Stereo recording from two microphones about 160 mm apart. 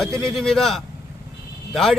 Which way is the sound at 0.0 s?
5° left (ahead or behind).